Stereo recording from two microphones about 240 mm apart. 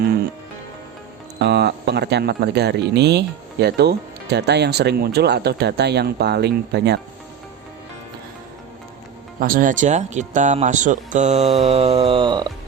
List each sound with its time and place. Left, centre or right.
1.4 s speech: right
9.4 s speech: right; by 12.5 s centre